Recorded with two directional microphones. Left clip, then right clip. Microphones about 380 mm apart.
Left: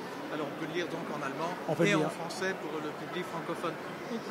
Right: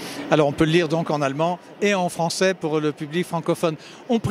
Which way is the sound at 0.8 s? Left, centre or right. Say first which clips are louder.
Right 14 dB; right.